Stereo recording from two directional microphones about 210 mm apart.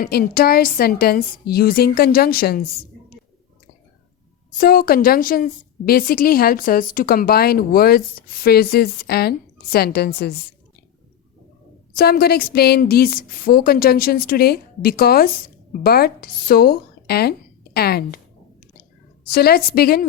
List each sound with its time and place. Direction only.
0.0 s a woman's voice: 45° left (ahead or behind)
4.5 s a woman's voice: 45° left (ahead or behind)
11.9 s a woman's voice: 45° left (ahead or behind)
18.8 s a sound: 45° left (ahead or behind)